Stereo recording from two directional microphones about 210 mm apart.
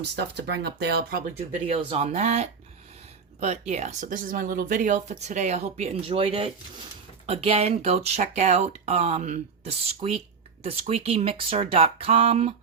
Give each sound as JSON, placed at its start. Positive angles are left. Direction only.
{"t": 0.0, "sound": "speech", "side_deg": -50}
{"t": 1.6, "sound": "speech", "side_deg": -30}